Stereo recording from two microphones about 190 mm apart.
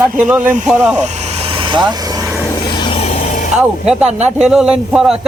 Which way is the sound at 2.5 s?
25° left (ahead or behind).